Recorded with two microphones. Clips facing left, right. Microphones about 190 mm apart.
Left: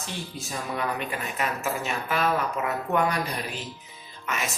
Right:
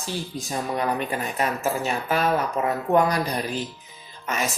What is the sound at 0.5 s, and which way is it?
Speech, 35° right (ahead or behind).